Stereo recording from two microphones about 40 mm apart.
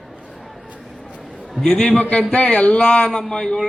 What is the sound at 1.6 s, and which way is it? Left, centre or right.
Speech, centre.